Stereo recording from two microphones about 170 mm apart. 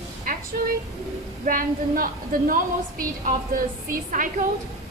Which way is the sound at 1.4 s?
55° right (ahead or behind).